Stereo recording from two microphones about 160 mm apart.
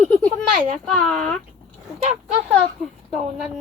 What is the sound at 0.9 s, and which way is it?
Speech, 5° left (ahead or behind).